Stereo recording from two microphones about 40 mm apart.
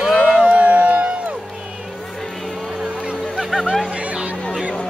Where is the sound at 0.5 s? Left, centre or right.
Right.